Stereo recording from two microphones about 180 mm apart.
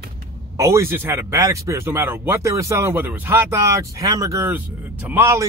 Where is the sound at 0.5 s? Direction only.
15° right (ahead or behind).